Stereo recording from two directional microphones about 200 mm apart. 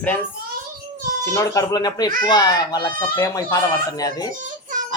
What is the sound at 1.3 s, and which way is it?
Speech, 15° left (ahead or behind).